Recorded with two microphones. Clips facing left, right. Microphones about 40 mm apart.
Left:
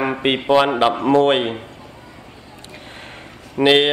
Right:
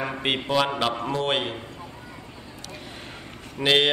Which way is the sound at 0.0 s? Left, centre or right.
Left.